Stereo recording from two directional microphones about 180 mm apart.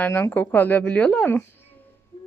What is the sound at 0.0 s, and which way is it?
A woman's voice, 10° left (ahead or behind).